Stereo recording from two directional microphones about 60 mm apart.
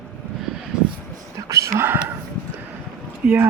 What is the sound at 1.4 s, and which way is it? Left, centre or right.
Whispering, right.